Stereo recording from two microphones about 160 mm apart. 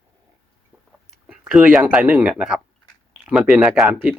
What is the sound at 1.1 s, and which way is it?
Speech, 5° right (ahead or behind).